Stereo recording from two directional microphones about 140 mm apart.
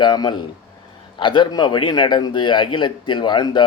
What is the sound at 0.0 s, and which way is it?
A man's voice, 35° left (ahead or behind).